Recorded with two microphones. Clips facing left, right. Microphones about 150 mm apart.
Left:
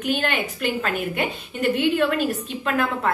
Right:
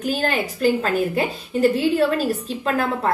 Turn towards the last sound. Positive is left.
turn(degrees=-35)  # may be behind; listen again after turning